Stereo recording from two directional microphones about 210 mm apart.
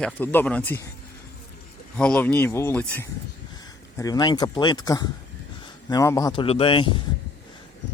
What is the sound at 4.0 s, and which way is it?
Speech, 20° left (ahead or behind).